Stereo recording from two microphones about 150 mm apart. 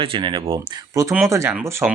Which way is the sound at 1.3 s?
20° right (ahead or behind).